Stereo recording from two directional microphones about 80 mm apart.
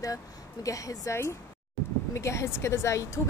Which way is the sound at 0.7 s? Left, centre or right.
Left.